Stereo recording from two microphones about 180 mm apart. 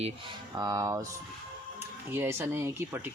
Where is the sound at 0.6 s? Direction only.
20° right (ahead or behind).